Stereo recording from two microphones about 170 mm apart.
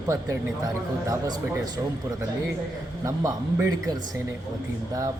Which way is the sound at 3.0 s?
20° right (ahead or behind).